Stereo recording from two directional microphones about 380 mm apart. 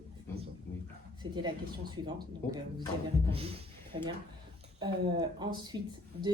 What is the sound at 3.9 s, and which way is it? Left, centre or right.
Speech, centre.